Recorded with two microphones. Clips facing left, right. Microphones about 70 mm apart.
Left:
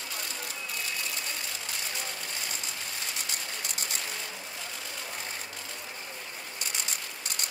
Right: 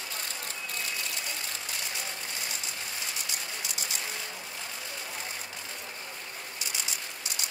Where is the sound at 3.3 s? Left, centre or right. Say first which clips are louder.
Even; left.